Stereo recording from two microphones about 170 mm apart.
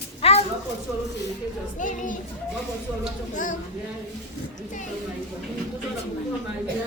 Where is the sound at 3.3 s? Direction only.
50° left (ahead or behind).